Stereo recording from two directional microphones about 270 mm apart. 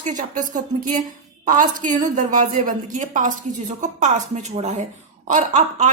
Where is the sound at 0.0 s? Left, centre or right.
Right.